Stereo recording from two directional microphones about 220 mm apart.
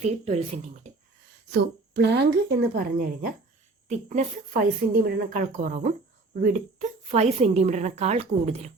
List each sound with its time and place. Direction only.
0.0 s speech: 25° right (ahead or behind)
1.5 s a woman's voice: 50° right (ahead or behind); by 8.7 s 30° right (ahead or behind)